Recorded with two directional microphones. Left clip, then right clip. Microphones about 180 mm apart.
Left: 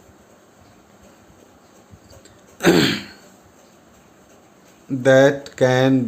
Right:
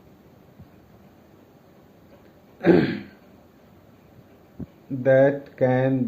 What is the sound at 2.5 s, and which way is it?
Throat clearing, 90° left.